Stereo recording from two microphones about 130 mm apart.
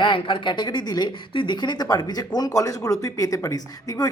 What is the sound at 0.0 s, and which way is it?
Speech, 35° left (ahead or behind).